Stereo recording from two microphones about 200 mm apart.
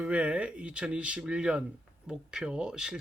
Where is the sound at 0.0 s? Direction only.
5° right (ahead or behind).